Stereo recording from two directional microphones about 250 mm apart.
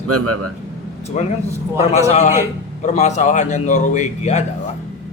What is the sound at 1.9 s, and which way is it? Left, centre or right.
A man's voice, left.